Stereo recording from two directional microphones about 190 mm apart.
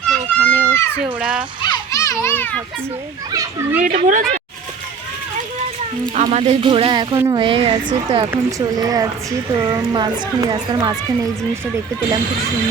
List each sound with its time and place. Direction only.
0.0 s children playing: 10° left (ahead or behind)
1.2 s speech: 5° right (ahead or behind)
1.6 s children playing: 20° left (ahead or behind)
3.8 s speech: 40° right (ahead or behind)
6.1 s speech: 30° right (ahead or behind)
8.3 s speech: 15° right (ahead or behind)